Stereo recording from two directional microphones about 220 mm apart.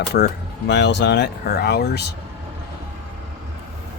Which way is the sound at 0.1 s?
45° left (ahead or behind).